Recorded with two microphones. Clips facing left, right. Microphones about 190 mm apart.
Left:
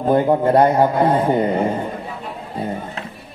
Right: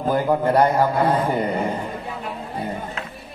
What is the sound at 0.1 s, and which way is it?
A man's voice, 25° left (ahead or behind).